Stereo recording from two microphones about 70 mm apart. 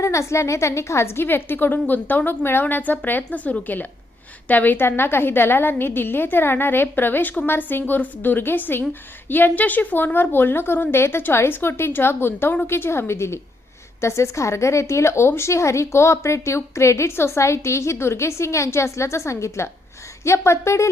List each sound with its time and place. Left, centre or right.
0.0 s a woman's voice: left